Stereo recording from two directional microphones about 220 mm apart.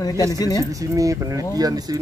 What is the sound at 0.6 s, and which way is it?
Speech, 15° right (ahead or behind).